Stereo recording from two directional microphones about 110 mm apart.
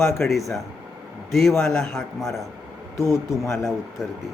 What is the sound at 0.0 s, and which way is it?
Speech, centre (ahead or behind).